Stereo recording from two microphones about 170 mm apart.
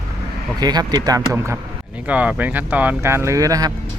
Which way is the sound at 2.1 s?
10° right (ahead or behind).